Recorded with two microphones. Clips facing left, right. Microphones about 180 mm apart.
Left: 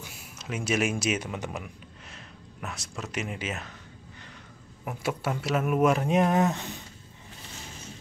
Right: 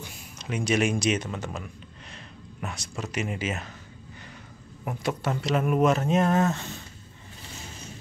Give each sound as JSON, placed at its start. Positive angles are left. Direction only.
{"t": 0.0, "sound": "speech", "side_deg": 5}
{"t": 2.0, "sound": "speech", "side_deg": 0}
{"t": 4.8, "sound": "speech", "side_deg": 10}